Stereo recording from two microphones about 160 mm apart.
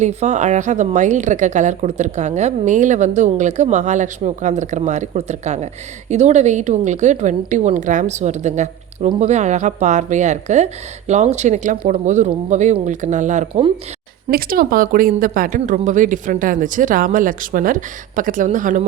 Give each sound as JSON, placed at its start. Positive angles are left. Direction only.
{"t": 0.0, "sound": "a woman's voice", "side_deg": -45}
{"t": 14.3, "sound": "speech", "side_deg": -65}